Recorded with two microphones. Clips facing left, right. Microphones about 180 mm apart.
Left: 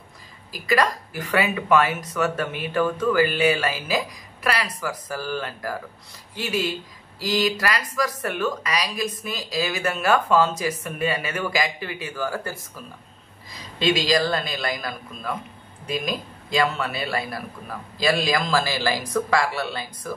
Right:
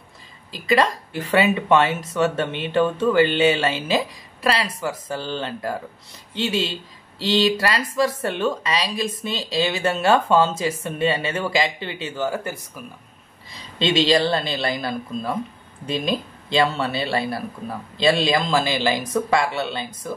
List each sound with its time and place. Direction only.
0.5 s speech: 25° right (ahead or behind)